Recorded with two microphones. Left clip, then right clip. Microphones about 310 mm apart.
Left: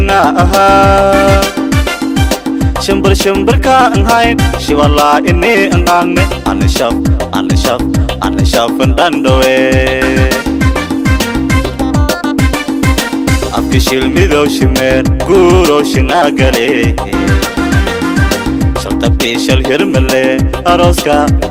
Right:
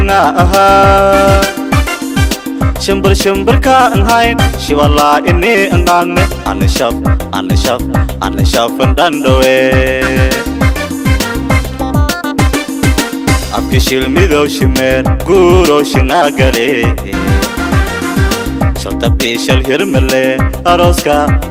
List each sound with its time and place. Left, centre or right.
0.1 s music: right
2.9 s music: right
8.5 s music: right
13.9 s music: right
19.0 s music: right